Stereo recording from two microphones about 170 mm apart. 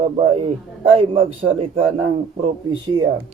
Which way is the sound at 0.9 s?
35° right (ahead or behind).